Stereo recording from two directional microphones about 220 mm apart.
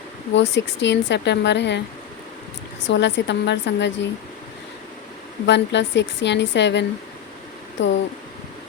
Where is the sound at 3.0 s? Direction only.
50° left (ahead or behind).